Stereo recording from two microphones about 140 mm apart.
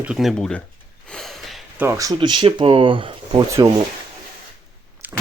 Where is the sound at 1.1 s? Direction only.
Centre (ahead or behind).